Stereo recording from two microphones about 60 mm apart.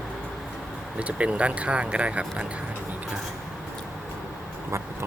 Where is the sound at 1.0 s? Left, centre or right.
Right.